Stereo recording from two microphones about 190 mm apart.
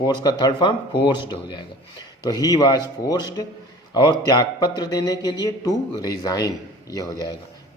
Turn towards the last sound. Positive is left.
turn(degrees=20)  # may be behind; listen again after turning